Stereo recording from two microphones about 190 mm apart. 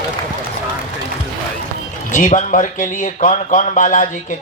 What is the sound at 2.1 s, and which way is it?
Speech, 40° left (ahead or behind).